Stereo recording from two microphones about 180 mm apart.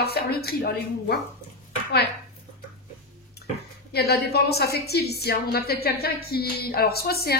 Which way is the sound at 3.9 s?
60° left (ahead or behind).